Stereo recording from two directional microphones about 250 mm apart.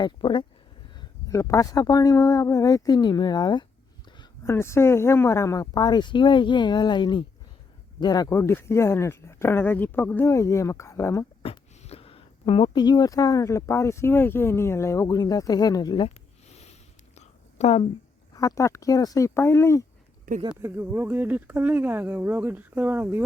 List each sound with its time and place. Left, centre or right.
0.0 s speech: centre
11.4 s speech: left
17.2 s a sound: left
18.3 s speech: centre
20.6 s speech: centre